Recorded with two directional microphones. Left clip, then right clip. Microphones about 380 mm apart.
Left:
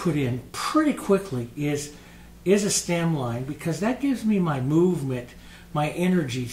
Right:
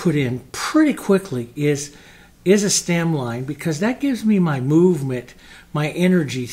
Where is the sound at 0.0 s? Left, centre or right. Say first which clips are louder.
Right 5 dB; right.